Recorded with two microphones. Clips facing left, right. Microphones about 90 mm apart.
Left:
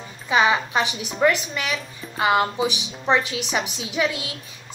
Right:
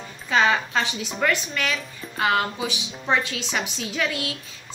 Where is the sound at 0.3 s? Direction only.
15° left (ahead or behind).